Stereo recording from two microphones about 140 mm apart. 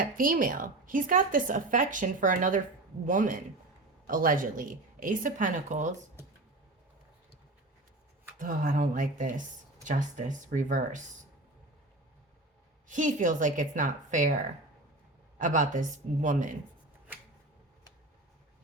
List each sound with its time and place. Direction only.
0.0 s speech: 85° right; by 5.9 s 60° right (ahead or behind)
8.4 s a woman's voice: 70° right (ahead or behind)
12.9 s a woman's voice: 65° right (ahead or behind)
15.4 s a woman's voice: 65° right (ahead or behind)